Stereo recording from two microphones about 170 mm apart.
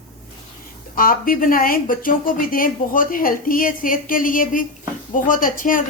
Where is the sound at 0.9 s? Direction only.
55° left (ahead or behind).